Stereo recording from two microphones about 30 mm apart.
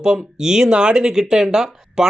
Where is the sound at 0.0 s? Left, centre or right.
Right.